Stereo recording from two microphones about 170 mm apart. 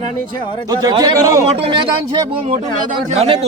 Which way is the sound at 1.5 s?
35° right (ahead or behind).